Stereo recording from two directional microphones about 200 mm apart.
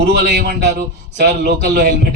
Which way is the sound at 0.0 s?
55° right (ahead or behind).